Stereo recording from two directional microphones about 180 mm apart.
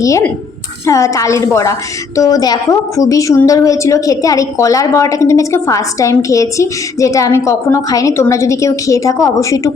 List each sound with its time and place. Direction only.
0.0 s a woman's voice: 15° left (ahead or behind)